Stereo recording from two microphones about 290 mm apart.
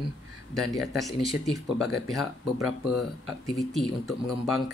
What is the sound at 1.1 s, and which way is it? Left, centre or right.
Speech, centre.